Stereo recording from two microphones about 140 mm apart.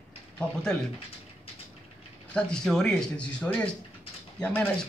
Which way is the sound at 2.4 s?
5° left (ahead or behind).